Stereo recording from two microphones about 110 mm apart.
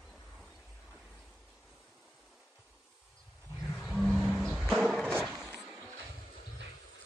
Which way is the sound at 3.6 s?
Centre (ahead or behind).